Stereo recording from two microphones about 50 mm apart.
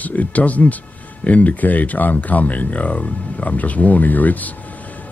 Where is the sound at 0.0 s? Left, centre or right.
Left.